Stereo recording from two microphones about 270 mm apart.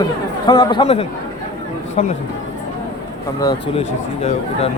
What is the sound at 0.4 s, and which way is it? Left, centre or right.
Speech, centre.